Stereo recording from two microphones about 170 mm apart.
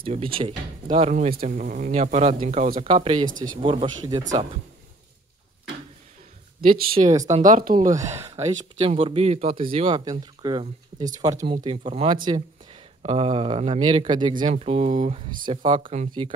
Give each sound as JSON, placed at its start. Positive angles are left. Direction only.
{"t": 0.0, "sound": "speech", "side_deg": -35}
{"t": 1.3, "sound": "speech", "side_deg": -55}
{"t": 2.8, "sound": "speech", "side_deg": -30}
{"t": 4.2, "sound": "speech", "side_deg": -45}
{"t": 7.0, "sound": "speech", "side_deg": -20}
{"t": 7.2, "sound": "speech", "side_deg": -45}
{"t": 15.4, "sound": "speech", "side_deg": -30}